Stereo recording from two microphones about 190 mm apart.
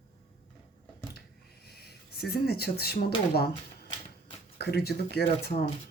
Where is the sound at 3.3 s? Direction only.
55° left (ahead or behind).